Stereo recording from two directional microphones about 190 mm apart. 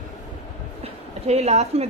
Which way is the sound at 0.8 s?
35° right (ahead or behind).